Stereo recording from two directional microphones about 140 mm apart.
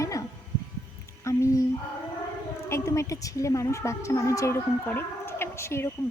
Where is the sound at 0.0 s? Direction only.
25° left (ahead or behind).